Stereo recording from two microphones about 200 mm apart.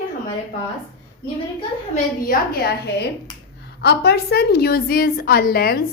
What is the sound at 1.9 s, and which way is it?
A woman's voice, 50° left (ahead or behind).